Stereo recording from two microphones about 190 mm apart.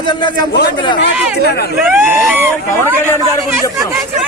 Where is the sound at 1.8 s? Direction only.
10° right (ahead or behind).